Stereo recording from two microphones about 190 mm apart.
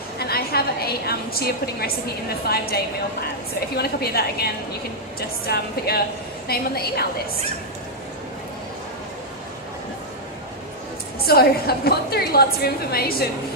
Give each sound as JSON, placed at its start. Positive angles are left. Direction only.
{"t": 0.2, "sound": "a woman's voice", "side_deg": 55}
{"t": 11.3, "sound": "a woman's voice", "side_deg": 55}